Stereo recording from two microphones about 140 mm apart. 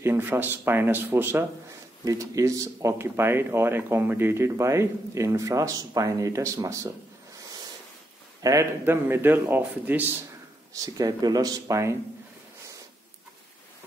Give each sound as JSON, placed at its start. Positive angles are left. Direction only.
{"t": 0.0, "sound": "a man's voice", "side_deg": -15}
{"t": 8.4, "sound": "a man's voice", "side_deg": -25}
{"t": 10.7, "sound": "speech", "side_deg": -25}